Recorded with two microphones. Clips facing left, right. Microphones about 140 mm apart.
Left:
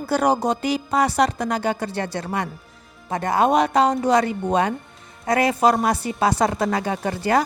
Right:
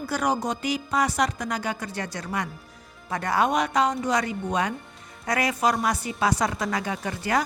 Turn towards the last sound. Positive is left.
turn(degrees=30)  # may be behind; listen again after turning